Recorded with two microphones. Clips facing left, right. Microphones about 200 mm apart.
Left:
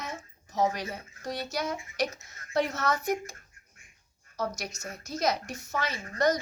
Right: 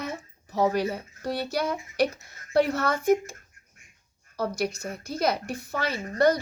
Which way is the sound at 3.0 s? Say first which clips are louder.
Right 8 dB; 50° right (ahead or behind).